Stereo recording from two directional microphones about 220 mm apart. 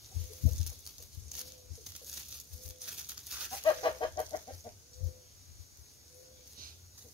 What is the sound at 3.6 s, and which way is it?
Chicken, 20° left (ahead or behind).